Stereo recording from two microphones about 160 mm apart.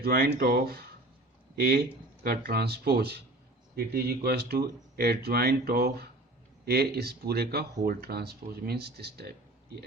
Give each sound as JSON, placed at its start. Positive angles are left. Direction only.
{"t": 0.0, "sound": "speech", "side_deg": -75}
{"t": 3.8, "sound": "speech", "side_deg": -75}